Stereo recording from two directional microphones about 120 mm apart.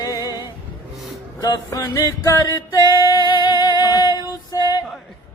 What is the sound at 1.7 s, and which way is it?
Music, 25° left (ahead or behind).